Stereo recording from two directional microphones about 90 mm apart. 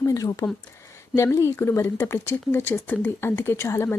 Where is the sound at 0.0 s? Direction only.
40° left (ahead or behind).